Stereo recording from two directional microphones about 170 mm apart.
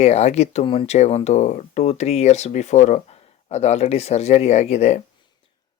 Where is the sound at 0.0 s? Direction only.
40° left (ahead or behind).